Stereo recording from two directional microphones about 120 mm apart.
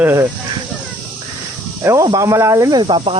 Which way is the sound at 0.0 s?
20° right (ahead or behind).